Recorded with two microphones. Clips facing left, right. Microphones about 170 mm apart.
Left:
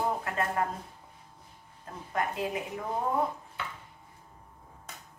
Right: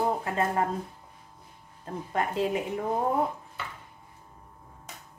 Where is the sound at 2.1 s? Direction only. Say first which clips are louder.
Right 4 dB; 25° right (ahead or behind).